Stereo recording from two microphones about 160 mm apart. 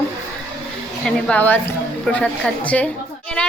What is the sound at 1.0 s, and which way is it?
A child's voice, 10° left (ahead or behind).